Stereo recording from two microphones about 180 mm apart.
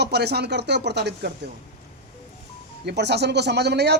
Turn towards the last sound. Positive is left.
turn(degrees=-70)  # may be behind; listen again after turning